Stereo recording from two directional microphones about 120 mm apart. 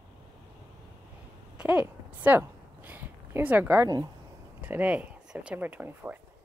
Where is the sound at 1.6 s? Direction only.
10° right (ahead or behind).